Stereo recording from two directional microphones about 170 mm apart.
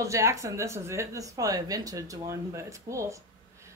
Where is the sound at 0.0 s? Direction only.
20° right (ahead or behind).